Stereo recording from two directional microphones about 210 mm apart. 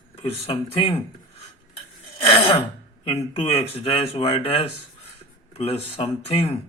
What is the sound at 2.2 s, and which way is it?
Speech, 25° left (ahead or behind).